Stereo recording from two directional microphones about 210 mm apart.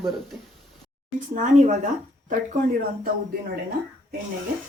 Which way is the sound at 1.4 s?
35° right (ahead or behind).